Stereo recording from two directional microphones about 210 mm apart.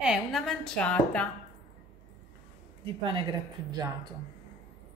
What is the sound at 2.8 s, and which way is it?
Speech, 25° right (ahead or behind).